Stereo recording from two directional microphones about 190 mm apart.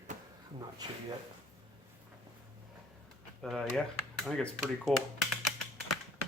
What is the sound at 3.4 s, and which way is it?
Speech, centre (ahead or behind).